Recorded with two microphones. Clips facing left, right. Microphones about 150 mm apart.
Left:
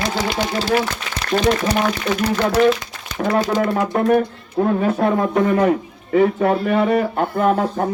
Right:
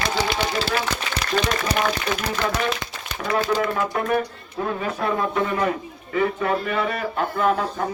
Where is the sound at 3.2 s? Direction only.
45° left (ahead or behind).